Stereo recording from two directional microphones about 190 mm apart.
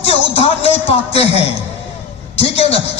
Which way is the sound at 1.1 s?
30° left (ahead or behind).